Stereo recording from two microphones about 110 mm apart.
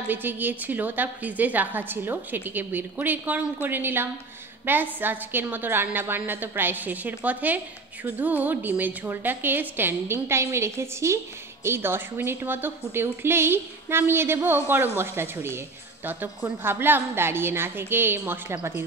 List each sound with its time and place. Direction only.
0.1 s a woman's voice: 15° right (ahead or behind)